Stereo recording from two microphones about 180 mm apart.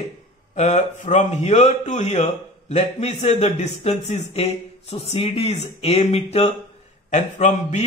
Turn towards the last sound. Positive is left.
turn(degrees=40)  # may be behind; listen again after turning